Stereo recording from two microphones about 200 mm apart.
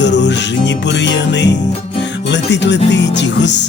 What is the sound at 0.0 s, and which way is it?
Music, 60° left (ahead or behind).